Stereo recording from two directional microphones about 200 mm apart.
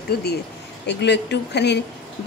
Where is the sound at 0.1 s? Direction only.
55° left (ahead or behind).